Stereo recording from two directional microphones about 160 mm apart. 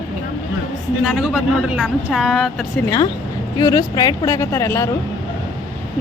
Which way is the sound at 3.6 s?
25° left (ahead or behind).